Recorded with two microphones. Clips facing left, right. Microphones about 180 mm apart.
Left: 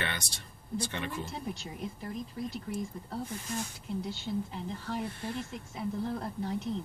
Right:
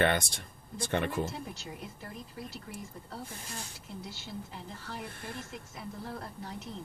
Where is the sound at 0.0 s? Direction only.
55° right (ahead or behind).